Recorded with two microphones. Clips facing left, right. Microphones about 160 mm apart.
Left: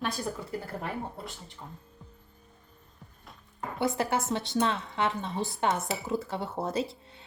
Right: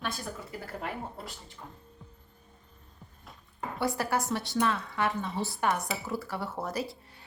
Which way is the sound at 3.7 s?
20° left (ahead or behind).